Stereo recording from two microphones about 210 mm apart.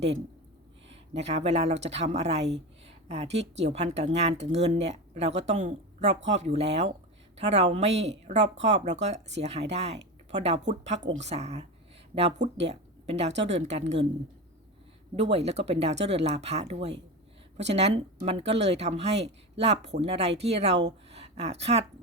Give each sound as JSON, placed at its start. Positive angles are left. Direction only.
{"t": 0.9, "sound": "speech", "side_deg": -30}
{"t": 15.3, "sound": "speech", "side_deg": -30}